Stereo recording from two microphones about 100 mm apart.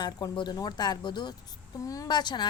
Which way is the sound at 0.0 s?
45° left (ahead or behind).